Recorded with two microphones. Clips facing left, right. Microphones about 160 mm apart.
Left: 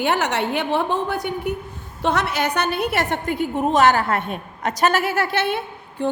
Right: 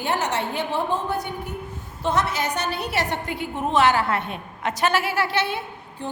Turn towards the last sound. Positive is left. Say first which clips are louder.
# left 5 dB
turn(degrees=60)  # may be behind; listen again after turning